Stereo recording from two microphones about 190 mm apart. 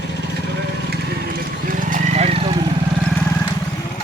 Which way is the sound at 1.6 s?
40° right (ahead or behind).